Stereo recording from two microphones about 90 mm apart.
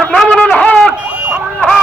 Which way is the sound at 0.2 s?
15° left (ahead or behind).